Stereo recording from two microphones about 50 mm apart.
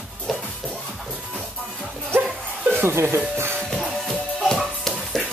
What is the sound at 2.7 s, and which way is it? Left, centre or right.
Speech, right.